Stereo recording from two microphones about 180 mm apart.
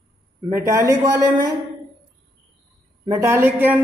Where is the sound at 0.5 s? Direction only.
15° right (ahead or behind).